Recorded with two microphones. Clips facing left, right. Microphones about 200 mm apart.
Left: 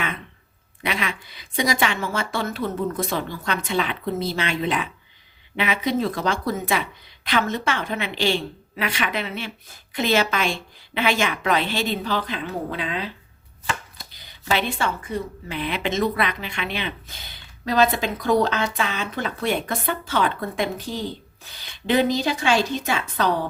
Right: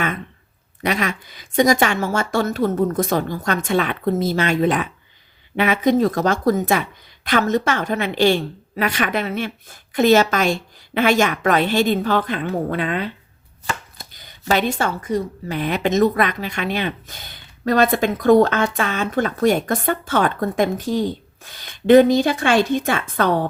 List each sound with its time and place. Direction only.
0.8 s chopping: 45° right (ahead or behind)